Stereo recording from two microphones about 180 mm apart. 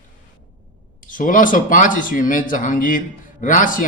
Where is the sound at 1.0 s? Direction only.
50° left (ahead or behind).